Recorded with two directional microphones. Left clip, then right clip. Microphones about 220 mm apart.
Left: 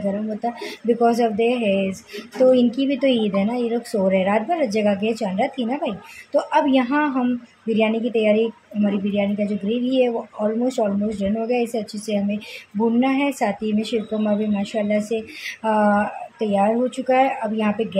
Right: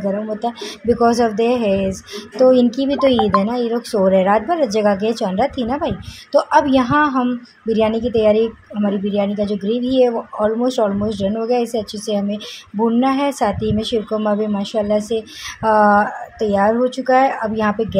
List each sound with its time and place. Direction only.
0.4 s speech: 20° right (ahead or behind)